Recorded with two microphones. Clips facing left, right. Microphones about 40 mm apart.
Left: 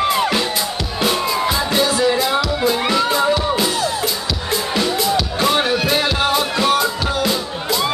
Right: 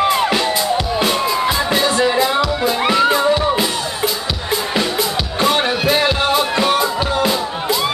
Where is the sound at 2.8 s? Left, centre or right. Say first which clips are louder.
Right 3 dB; centre.